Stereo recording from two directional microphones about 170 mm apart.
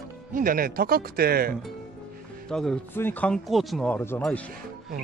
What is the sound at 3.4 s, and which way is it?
Speech, centre (ahead or behind).